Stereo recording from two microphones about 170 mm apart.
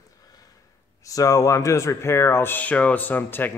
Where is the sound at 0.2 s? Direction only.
20° left (ahead or behind).